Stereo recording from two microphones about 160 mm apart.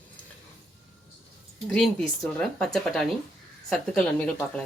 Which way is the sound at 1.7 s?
5° left (ahead or behind).